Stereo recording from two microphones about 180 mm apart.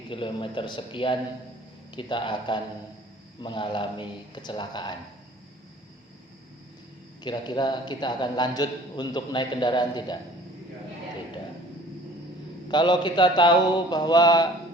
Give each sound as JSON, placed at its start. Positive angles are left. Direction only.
{"t": 0.1, "sound": "a man's voice", "side_deg": 30}
{"t": 7.3, "sound": "a man's voice", "side_deg": 25}
{"t": 12.6, "sound": "a man's voice", "side_deg": 25}